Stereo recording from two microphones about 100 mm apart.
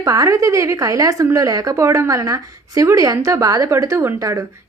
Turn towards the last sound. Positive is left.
turn(degrees=-30)  # may be behind; listen again after turning